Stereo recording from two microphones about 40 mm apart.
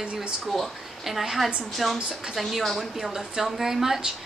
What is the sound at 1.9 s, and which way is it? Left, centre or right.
Speech, centre.